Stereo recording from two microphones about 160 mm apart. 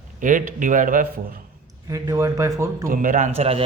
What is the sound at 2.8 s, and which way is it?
Speech, 55° right (ahead or behind).